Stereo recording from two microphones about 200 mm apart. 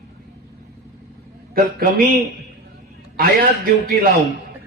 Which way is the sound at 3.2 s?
45° right (ahead or behind).